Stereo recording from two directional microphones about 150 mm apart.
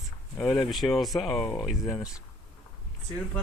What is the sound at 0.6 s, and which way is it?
Speech, centre (ahead or behind).